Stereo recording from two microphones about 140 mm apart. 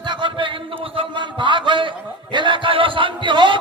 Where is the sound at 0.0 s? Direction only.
35° right (ahead or behind).